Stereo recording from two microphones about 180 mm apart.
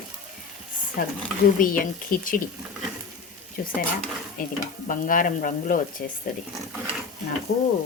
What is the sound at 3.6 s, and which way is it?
Speech, 55° left (ahead or behind).